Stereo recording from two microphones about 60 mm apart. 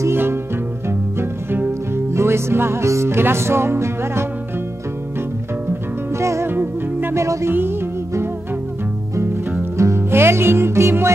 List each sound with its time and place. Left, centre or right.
0.1 s music: right
5.7 s music: right
6.4 s music: right
7.2 s music: right
9.1 s music: right